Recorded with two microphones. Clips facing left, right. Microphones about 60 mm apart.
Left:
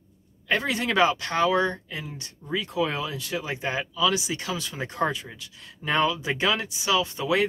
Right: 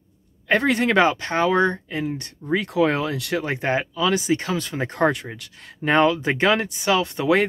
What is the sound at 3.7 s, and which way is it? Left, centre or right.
Speech, right.